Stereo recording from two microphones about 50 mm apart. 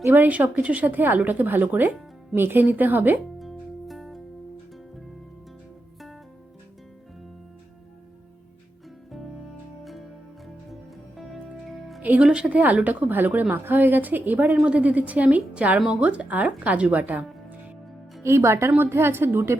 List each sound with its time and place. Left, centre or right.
0.1 s speech: right
3.3 s music: centre
11.6 s music: centre
12.2 s a woman's voice: centre
12.5 s speech: right
14.5 s a woman's voice: right
18.2 s speech: right
18.8 s a woman's voice: right